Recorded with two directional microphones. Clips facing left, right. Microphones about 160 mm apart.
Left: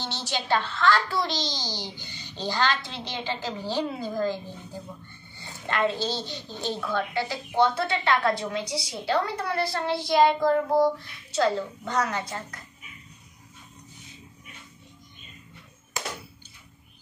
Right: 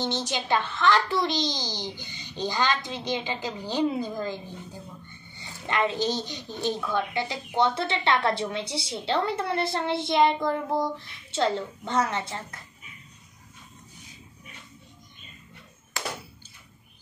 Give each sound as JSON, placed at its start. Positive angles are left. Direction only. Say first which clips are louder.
{"t": 0.0, "sound": "a woman's voice", "louder": "right 3 dB", "side_deg": -20}